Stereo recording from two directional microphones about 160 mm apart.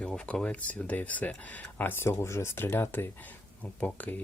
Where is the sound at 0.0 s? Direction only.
5° left (ahead or behind).